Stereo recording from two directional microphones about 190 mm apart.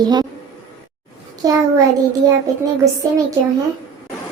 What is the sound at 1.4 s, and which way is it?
Speech, 20° right (ahead or behind).